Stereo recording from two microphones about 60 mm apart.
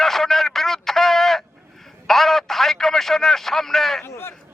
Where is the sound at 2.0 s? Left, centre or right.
Centre.